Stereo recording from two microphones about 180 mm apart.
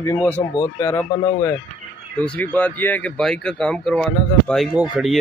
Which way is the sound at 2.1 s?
10° left (ahead or behind).